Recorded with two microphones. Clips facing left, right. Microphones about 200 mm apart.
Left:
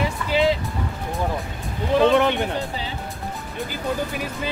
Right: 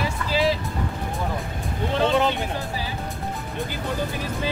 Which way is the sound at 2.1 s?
60° left (ahead or behind).